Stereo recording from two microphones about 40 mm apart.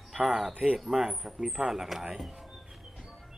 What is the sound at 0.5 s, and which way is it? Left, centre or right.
Speech, right.